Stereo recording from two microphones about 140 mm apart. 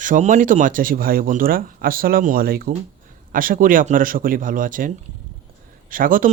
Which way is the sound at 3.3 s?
80° right.